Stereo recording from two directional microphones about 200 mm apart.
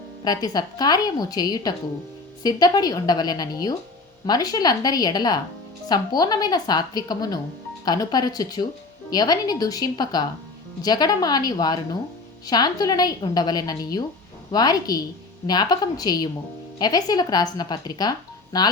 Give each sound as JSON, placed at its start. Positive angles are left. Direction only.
{"t": 0.3, "sound": "a woman's voice", "side_deg": 20}